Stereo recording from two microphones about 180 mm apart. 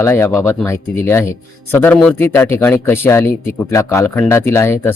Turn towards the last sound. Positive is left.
turn(degrees=15)  # may be behind; listen again after turning